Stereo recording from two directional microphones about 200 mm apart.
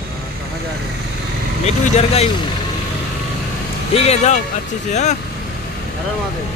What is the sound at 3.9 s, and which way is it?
Speech, 30° left (ahead or behind).